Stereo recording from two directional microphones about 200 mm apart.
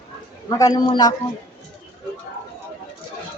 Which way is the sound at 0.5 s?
20° left (ahead or behind).